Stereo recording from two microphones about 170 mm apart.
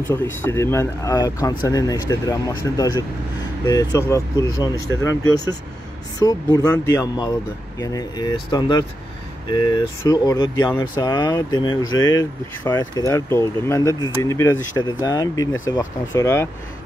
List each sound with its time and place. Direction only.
0.1 s speech: 15° left (ahead or behind)
6.1 s speech: 25° left (ahead or behind)